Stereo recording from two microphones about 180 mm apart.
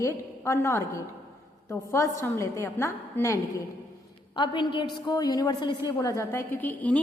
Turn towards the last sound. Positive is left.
turn(degrees=10)  # may be behind; listen again after turning